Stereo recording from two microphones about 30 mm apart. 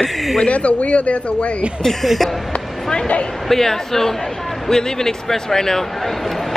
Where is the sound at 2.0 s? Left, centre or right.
Centre.